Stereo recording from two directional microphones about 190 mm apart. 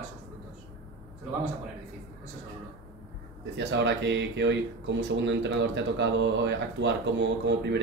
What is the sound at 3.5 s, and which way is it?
Speech, 70° right (ahead or behind).